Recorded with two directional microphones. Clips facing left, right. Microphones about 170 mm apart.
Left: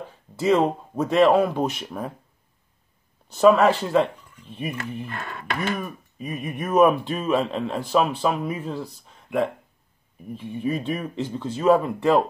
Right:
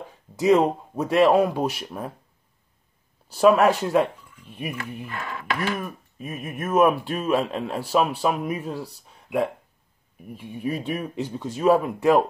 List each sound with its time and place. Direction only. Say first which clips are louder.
0.4 s speech: right 2 dB; 15° right (ahead or behind)
3.3 s speech: left 1 dB; 10° right (ahead or behind)
5.0 s speech: right 2 dB; 45° left (ahead or behind)
5.8 s speech: left 1 dB; centre (ahead or behind)